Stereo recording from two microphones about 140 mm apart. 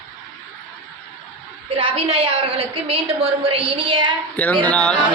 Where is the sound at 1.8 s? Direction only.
40° right (ahead or behind).